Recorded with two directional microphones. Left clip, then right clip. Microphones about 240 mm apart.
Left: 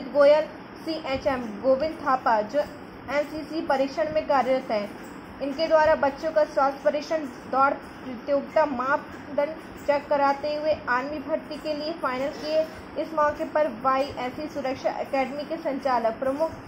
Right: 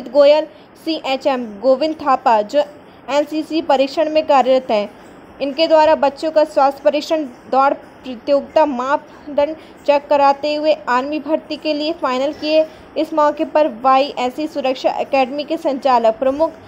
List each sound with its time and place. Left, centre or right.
0.1 s a woman's voice: right
8.3 s a woman's voice: right